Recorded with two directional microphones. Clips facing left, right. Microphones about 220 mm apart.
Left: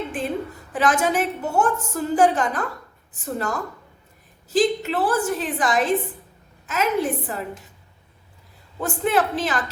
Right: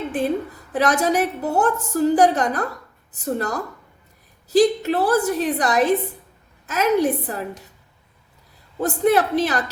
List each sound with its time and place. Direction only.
0.1 s a woman's voice: 40° right (ahead or behind)
8.8 s a woman's voice: 40° right (ahead or behind)